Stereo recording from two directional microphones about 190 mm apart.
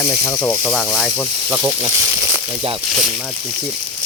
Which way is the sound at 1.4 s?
10° right (ahead or behind).